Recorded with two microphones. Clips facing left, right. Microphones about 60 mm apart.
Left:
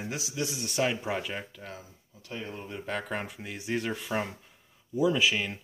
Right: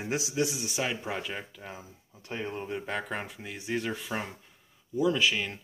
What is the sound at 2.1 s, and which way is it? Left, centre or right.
Speech, right.